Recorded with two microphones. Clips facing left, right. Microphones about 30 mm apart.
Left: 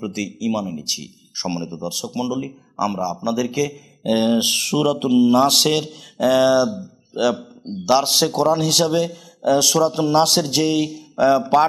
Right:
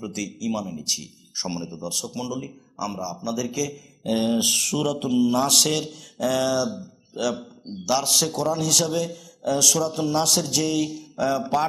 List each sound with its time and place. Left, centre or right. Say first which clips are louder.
0.0 s a man's voice: left 5 dB; centre